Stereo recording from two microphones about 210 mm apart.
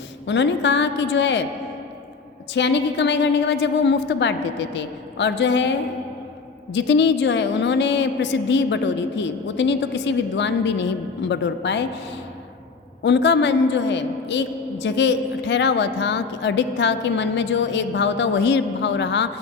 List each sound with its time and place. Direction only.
0.3 s a man's voice: 60° left (ahead or behind)
2.5 s a man's voice: 55° left (ahead or behind)
6.7 s a man's voice: 55° left (ahead or behind)
13.0 s a man's voice: 55° left (ahead or behind)